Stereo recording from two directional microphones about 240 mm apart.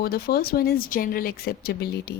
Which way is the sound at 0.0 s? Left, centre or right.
Left.